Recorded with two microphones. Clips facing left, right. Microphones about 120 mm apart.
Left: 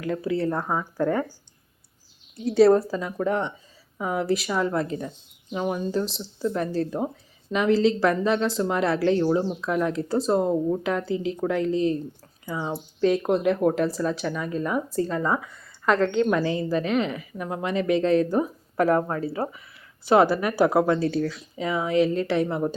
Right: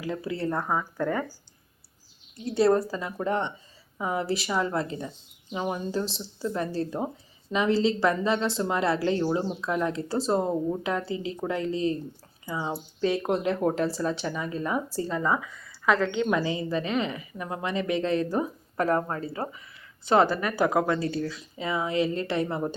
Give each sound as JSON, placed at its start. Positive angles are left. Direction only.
{"t": 0.0, "sound": "a woman's voice", "side_deg": -5}
{"t": 2.3, "sound": "a woman's voice", "side_deg": 0}
{"t": 13.7, "sound": "speech", "side_deg": -30}
{"t": 14.0, "sound": "a woman's voice", "side_deg": 0}
{"t": 21.0, "sound": "speech", "side_deg": 60}
{"t": 21.2, "sound": "a woman's voice", "side_deg": 0}